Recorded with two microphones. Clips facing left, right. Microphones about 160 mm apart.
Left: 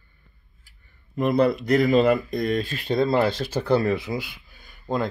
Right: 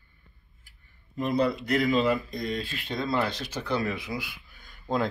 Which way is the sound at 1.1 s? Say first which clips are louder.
Left 5 dB; 60° left (ahead or behind).